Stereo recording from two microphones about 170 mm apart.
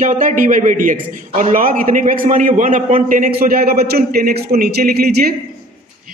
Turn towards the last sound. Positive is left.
turn(degrees=-65)  # may be behind; listen again after turning